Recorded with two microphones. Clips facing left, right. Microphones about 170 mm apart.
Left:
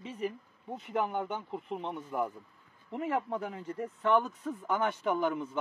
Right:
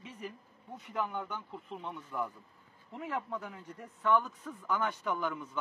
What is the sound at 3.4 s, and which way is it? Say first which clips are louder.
Speech: left 9 dB; 55° left (ahead or behind).